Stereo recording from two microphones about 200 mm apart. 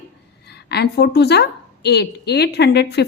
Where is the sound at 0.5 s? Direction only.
55° left (ahead or behind).